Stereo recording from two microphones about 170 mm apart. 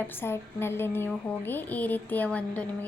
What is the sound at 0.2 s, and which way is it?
Speech, 15° left (ahead or behind).